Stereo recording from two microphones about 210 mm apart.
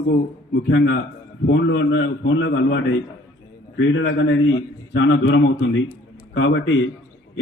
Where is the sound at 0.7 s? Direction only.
60° left (ahead or behind).